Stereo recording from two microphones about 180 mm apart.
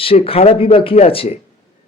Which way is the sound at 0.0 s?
30° left (ahead or behind).